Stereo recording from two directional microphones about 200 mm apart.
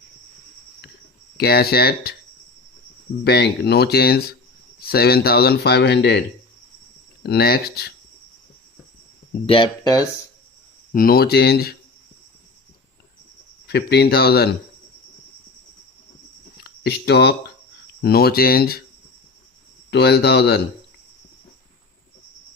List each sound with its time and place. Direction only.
1.4 s speech: 50° left (ahead or behind)
3.2 s speech: 55° left (ahead or behind)
9.5 s speech: 20° left (ahead or behind)
10.9 s speech: 45° left (ahead or behind)
13.7 s speech: 55° left (ahead or behind)
16.6 s speech: 55° left (ahead or behind)
19.9 s speech: 55° left (ahead or behind)